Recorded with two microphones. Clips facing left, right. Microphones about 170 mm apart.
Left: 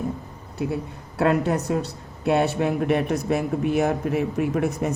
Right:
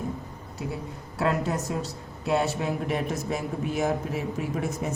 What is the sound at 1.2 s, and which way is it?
Speech, 60° left (ahead or behind).